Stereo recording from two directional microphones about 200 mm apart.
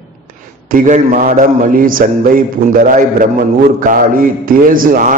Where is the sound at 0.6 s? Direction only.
40° right (ahead or behind).